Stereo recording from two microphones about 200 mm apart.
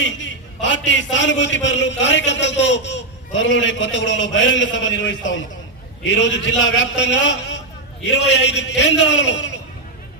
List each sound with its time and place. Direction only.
0.2 s a man's voice: 65° left (ahead or behind)